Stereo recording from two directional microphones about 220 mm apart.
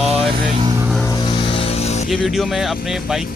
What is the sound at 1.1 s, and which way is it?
Music, 20° left (ahead or behind).